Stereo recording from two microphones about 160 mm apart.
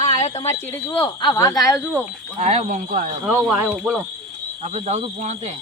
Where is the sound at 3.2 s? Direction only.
Centre (ahead or behind).